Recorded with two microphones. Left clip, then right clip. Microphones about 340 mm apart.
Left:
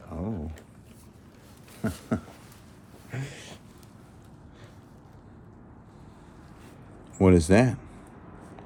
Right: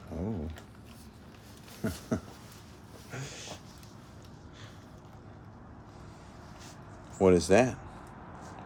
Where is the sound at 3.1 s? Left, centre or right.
Left.